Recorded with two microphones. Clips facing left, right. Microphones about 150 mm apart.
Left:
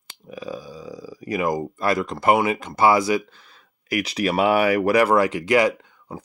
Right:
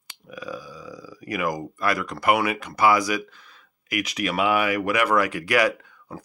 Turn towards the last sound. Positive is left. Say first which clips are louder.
# left 2 dB
turn(degrees=20)  # may be behind; listen again after turning